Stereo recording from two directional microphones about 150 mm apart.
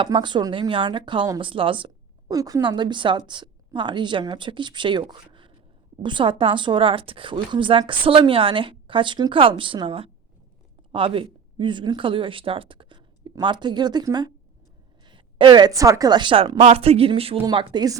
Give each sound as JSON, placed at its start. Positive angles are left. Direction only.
{"t": 0.0, "sound": "speech", "side_deg": -30}